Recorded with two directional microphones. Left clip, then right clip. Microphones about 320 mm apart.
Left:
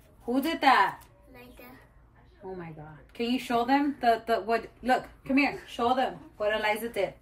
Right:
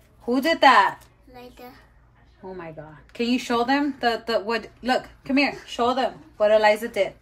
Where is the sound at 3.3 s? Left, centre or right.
Centre.